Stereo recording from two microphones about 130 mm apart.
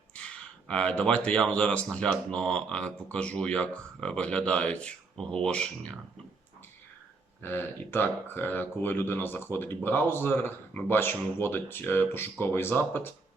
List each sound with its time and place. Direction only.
0.7 s speech: 5° left (ahead or behind)
7.4 s speech: 15° left (ahead or behind)